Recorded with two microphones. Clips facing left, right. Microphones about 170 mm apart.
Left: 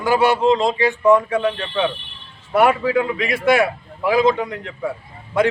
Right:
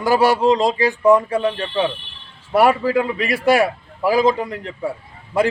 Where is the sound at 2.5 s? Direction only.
35° right (ahead or behind).